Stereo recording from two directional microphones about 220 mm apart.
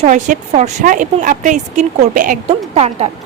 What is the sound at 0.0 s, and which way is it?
Speech, 35° right (ahead or behind).